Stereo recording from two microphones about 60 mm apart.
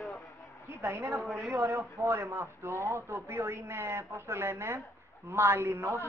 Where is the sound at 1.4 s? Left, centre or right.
Right.